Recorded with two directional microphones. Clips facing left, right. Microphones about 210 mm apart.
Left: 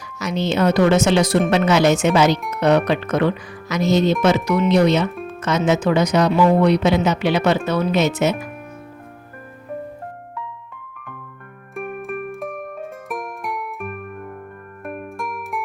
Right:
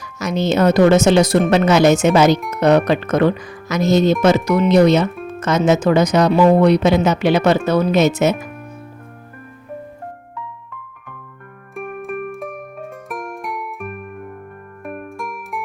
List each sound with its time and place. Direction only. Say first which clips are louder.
0.2 s speech: right 3 dB; 45° right (ahead or behind)
11.7 s music: right 1 dB; centre (ahead or behind)